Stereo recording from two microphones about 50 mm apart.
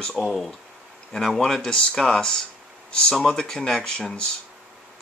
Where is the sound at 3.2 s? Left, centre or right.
Centre.